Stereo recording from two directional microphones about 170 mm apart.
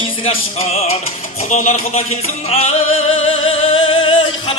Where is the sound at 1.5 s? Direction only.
45° left (ahead or behind).